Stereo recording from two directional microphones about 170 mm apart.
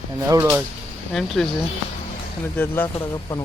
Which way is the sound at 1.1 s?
Centre (ahead or behind).